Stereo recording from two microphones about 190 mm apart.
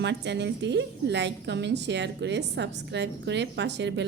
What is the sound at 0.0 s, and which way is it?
A woman's voice, 65° right (ahead or behind).